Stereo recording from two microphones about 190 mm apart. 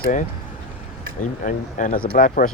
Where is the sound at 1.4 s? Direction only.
45° left (ahead or behind).